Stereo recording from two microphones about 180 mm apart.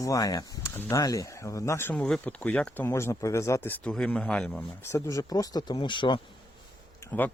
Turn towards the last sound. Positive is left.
turn(degrees=10)  # may be behind; listen again after turning